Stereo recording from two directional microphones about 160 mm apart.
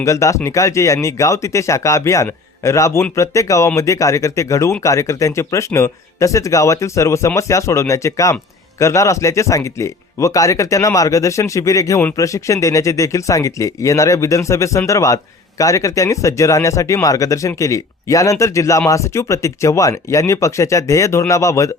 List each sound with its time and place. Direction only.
0.0 s speech: 20° left (ahead or behind)